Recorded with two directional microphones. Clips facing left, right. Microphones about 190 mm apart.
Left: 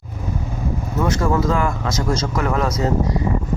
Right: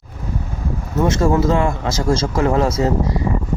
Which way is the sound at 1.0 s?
25° right (ahead or behind).